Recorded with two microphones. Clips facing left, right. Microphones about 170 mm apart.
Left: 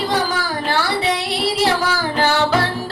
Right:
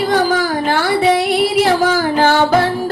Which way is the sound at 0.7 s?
50° right (ahead or behind).